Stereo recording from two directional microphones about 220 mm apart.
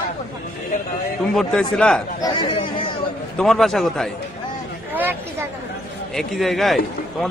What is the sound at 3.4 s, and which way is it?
Speech, centre (ahead or behind).